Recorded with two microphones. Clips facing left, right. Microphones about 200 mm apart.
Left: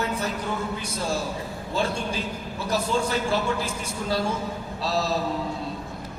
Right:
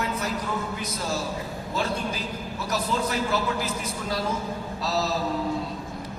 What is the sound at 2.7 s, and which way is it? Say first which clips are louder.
Speech: left 2 dB; 30° left (ahead or behind).